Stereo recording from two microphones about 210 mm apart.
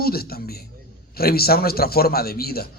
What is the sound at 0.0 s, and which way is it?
A man's voice, 45° left (ahead or behind).